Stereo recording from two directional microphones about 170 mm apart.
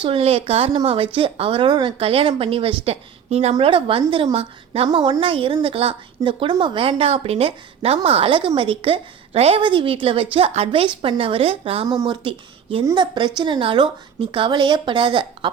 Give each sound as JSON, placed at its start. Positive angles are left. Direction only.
{"t": 0.0, "sound": "a woman's voice", "side_deg": -30}